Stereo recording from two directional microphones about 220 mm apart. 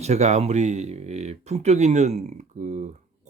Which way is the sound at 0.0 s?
30° right (ahead or behind).